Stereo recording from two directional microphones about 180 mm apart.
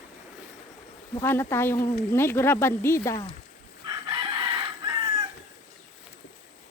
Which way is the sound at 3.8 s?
25° right (ahead or behind).